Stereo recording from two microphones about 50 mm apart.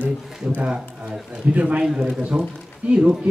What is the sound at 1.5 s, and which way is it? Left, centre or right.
Speech, right.